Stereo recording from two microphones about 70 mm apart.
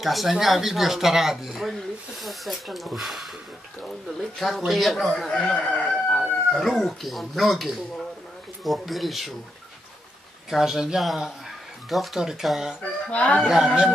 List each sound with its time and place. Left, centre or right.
0.0 s speech: centre
6.5 s speech: centre
10.5 s speech: centre
13.1 s speech: centre
13.4 s speech: centre